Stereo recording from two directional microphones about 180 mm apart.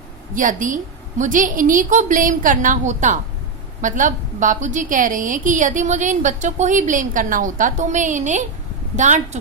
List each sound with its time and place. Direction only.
0.3 s a woman's voice: 45° right (ahead or behind)